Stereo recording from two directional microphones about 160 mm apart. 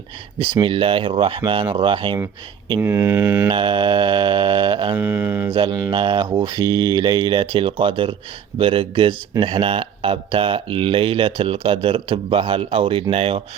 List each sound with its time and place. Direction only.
0.6 s speech: 35° right (ahead or behind)
2.8 s mantra: 15° right (ahead or behind)
3.5 s speech: 30° right (ahead or behind)
4.9 s mantra: 10° right (ahead or behind)
5.5 s speech: 30° right (ahead or behind)